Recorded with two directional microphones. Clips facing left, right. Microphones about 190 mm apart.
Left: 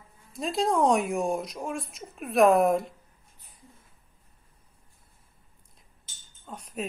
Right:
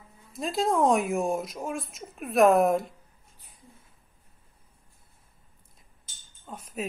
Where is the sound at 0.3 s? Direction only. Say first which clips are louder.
Even; centre (ahead or behind).